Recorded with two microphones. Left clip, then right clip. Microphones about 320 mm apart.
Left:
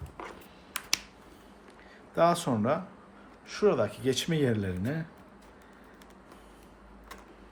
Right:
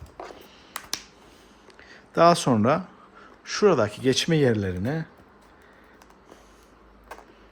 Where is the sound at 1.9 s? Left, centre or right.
Right.